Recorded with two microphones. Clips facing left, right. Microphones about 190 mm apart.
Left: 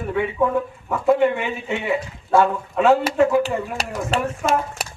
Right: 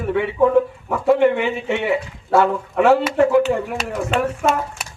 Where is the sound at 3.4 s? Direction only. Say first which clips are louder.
Right 4 dB; 35° left (ahead or behind).